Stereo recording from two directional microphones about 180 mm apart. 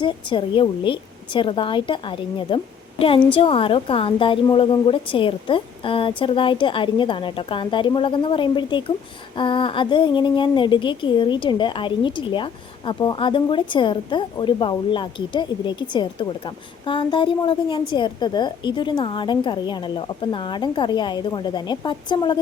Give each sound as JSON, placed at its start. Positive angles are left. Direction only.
{"t": 0.0, "sound": "a woman's voice", "side_deg": 25}